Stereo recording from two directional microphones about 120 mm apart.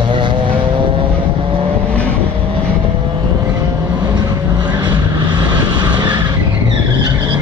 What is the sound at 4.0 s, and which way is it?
Vehicle, 35° right (ahead or behind).